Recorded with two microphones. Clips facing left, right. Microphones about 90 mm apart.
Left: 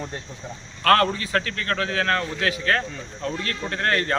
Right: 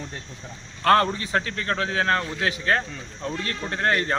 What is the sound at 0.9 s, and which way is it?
Speech, 20° right (ahead or behind).